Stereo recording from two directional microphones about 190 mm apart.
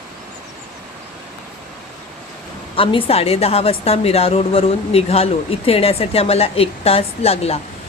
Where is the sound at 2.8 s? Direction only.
30° left (ahead or behind).